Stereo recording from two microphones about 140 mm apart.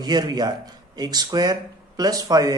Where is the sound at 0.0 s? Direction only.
30° right (ahead or behind).